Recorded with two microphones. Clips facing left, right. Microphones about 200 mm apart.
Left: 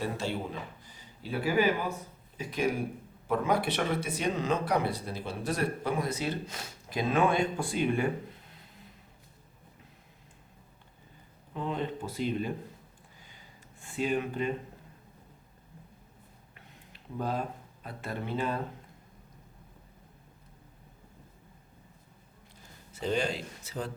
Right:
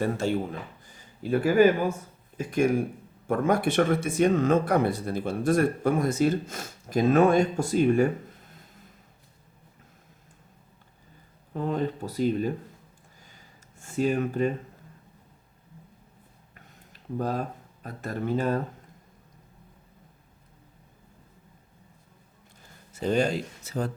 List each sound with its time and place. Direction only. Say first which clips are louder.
0.0 s speech: right 7 dB; 50° right (ahead or behind)
11.5 s speech: right 5 dB; 45° right (ahead or behind)
13.1 s a sound: even; 45° right (ahead or behind)
16.6 s a sound: right 2 dB; 45° right (ahead or behind)
17.8 s speech: right 6 dB; 45° right (ahead or behind)
23.0 s speech: right 6 dB; 45° right (ahead or behind)